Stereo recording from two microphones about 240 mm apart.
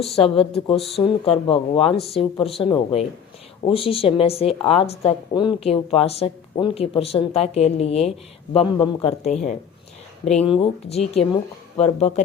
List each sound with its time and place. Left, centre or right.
0.3 s a woman's voice: left